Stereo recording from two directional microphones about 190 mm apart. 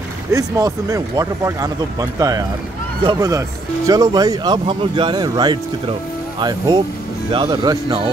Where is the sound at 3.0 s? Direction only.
20° right (ahead or behind).